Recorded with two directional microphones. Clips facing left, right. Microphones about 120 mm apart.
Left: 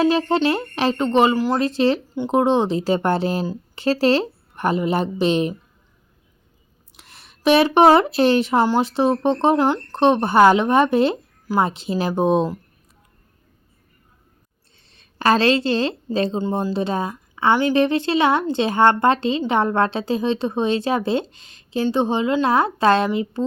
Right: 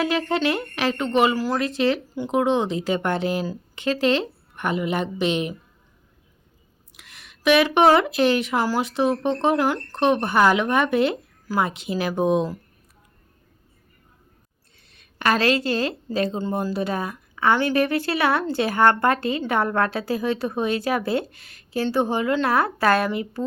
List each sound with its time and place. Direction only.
0.0 s speech: 30° left (ahead or behind)
6.9 s speech: 30° left (ahead or behind)
14.8 s a woman's voice: 30° left (ahead or behind)